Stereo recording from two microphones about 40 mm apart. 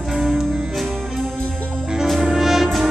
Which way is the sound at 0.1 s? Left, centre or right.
Centre.